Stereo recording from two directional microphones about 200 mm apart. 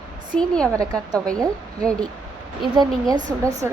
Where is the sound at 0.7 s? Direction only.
20° right (ahead or behind).